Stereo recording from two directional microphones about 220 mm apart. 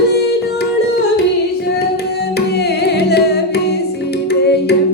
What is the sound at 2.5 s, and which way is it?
Music, 50° left (ahead or behind).